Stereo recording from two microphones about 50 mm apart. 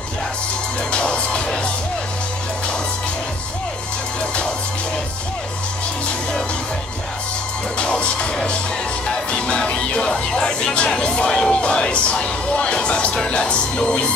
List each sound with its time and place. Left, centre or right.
0.9 s music: centre
7.7 s music: left